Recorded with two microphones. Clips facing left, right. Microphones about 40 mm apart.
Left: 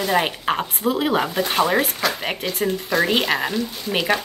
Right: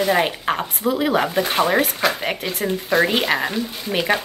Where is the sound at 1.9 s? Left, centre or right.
Centre.